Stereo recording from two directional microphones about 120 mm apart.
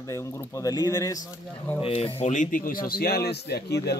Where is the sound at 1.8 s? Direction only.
55° left (ahead or behind); by 2.5 s 85° left.